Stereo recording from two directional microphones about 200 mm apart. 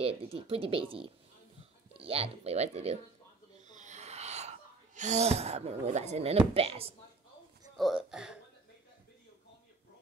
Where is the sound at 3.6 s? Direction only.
35° right (ahead or behind).